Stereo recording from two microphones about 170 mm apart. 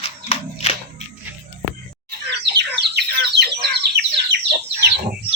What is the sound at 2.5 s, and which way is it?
Bird, 80° right.